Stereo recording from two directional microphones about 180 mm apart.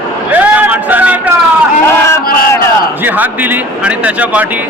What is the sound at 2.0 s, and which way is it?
Crowd, 15° left (ahead or behind).